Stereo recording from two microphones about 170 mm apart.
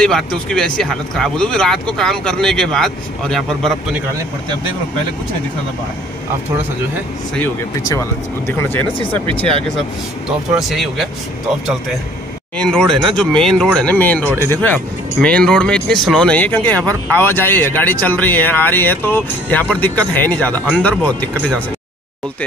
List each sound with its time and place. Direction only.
0.0 s speech: 5° left (ahead or behind)
7.8 s speech: 15° left (ahead or behind)
10.5 s speech: centre (ahead or behind)
12.6 s speech: centre (ahead or behind)
16.7 s speech: 20° right (ahead or behind)
17.1 s speech: 10° left (ahead or behind)